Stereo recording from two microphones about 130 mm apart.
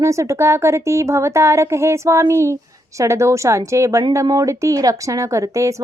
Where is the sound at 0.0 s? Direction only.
25° right (ahead or behind).